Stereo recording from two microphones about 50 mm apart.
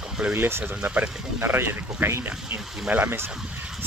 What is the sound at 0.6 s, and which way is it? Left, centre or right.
Speech, right.